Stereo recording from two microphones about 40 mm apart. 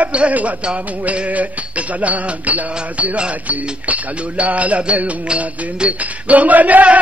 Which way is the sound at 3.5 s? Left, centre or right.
Right.